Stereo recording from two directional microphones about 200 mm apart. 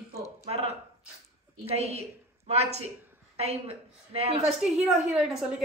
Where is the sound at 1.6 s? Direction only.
30° right (ahead or behind).